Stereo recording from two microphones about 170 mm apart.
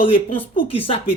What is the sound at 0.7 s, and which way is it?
Speech, 35° left (ahead or behind).